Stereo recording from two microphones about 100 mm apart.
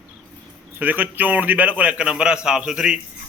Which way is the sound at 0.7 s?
15° right (ahead or behind).